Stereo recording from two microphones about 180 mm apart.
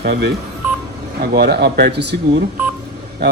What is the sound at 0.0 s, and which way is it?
A man's voice, 65° right (ahead or behind).